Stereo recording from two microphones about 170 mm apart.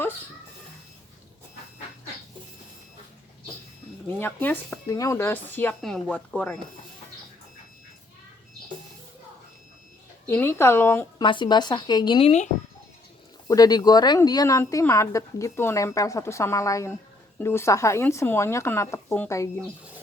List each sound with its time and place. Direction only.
4.2 s speech: 10° left (ahead or behind)
10.2 s speech: 15° left (ahead or behind)
11.2 s a woman's voice: 30° left (ahead or behind)
13.5 s speech: 20° left (ahead or behind)